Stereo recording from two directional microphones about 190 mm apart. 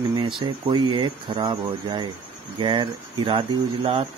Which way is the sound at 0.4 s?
25° right (ahead or behind).